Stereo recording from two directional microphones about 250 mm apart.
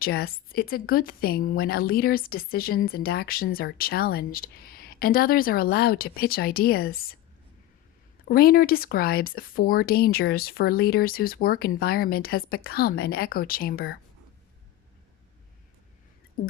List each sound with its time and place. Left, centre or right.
0.0 s a woman's voice: left
8.3 s a woman's voice: left